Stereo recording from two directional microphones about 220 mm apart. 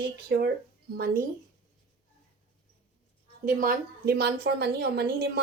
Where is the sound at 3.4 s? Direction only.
40° right (ahead or behind).